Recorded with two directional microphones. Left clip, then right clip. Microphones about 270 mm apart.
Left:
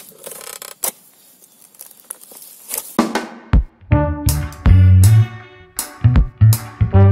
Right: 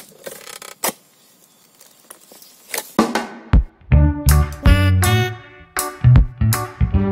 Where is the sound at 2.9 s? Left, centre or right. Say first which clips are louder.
Even; centre.